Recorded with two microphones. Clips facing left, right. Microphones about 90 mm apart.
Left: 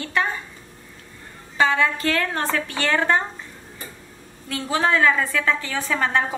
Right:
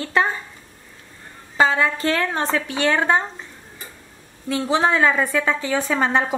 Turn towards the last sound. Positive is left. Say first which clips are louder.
# right 2 dB
turn(degrees=-20)  # may be behind; listen again after turning